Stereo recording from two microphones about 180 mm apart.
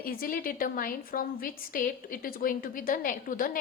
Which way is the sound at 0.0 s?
50° left (ahead or behind).